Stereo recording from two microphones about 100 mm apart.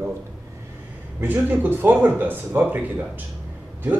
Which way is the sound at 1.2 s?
20° right (ahead or behind).